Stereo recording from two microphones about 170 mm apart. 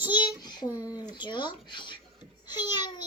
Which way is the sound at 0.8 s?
20° left (ahead or behind).